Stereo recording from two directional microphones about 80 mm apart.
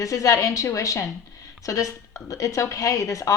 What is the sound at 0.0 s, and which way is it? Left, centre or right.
Speech, left.